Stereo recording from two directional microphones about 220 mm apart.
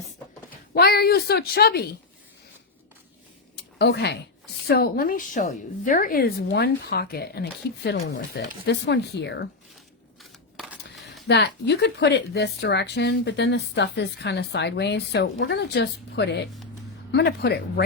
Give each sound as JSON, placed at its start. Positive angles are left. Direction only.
{"t": 0.7, "sound": "a woman's voice", "side_deg": 45}
{"t": 3.8, "sound": "a woman's voice", "side_deg": 50}
{"t": 11.3, "sound": "a woman's voice", "side_deg": 50}